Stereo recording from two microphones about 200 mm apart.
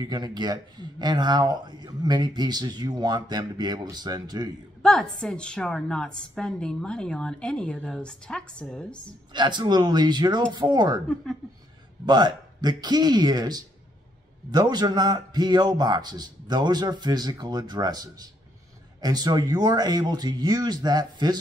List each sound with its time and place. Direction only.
0.0 s speech: 20° right (ahead or behind)
4.8 s a woman's voice: 5° left (ahead or behind)
9.3 s speech: 20° right (ahead or behind)
12.1 s speech: 20° right (ahead or behind)